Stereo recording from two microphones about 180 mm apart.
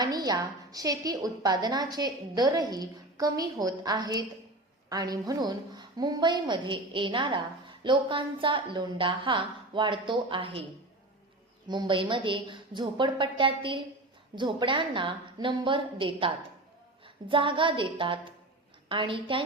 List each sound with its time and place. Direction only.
0.0 s a woman's voice: 20° right (ahead or behind)
11.7 s a woman's voice: 25° right (ahead or behind)